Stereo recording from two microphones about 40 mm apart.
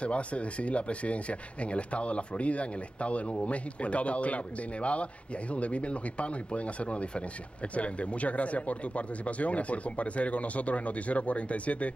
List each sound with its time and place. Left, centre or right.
0.0 s speech: left